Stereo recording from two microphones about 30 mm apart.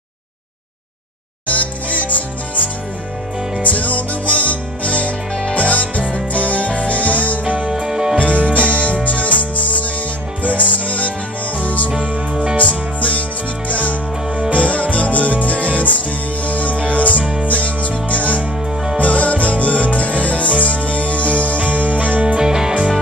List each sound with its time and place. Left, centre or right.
1.5 s music: left
3.6 s music: left
5.3 s music: left
5.6 s music: left
7.4 s music: right
7.7 s music: right
8.5 s music: left
17.2 s music: right
17.5 s music: left
21.5 s music: right
22.4 s music: right